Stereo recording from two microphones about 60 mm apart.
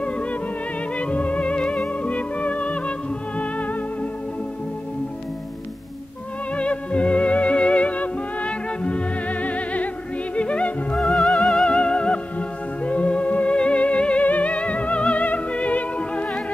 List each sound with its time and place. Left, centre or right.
0.0 s music: centre
6.5 s music: centre
11.0 s music: centre
11.7 s music: centre